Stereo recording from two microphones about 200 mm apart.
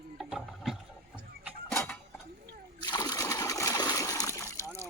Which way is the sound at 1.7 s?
5° left (ahead or behind).